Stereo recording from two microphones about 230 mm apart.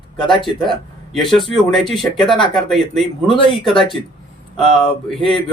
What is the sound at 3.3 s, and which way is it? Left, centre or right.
Speech, left.